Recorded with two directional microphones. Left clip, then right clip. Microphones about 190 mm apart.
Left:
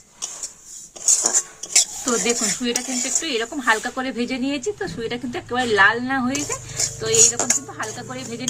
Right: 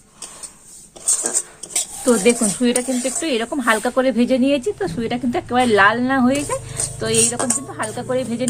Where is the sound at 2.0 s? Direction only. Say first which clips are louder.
Right 6 dB; 45° right (ahead or behind).